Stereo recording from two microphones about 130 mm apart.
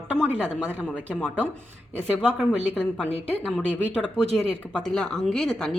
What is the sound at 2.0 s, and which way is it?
Speech, 10° right (ahead or behind).